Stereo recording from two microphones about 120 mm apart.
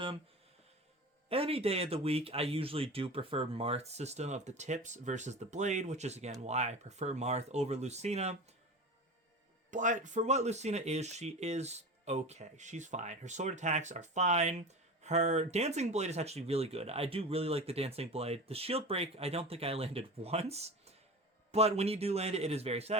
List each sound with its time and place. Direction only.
1.3 s speech: 50° right (ahead or behind)
9.6 s speech: 90° right; by 23.0 s 60° right (ahead or behind)